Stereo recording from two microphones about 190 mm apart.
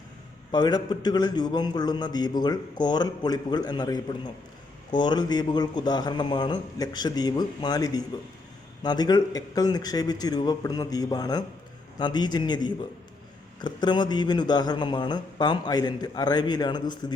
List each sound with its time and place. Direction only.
0.5 s a man's voice: 25° left (ahead or behind)